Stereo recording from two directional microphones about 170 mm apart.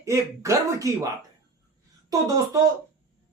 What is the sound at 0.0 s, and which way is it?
Speech, 20° right (ahead or behind).